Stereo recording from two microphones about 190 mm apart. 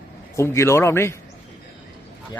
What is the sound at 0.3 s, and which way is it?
Speech, 15° left (ahead or behind).